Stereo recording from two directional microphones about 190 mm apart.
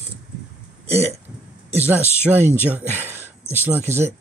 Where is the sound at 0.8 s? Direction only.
35° right (ahead or behind).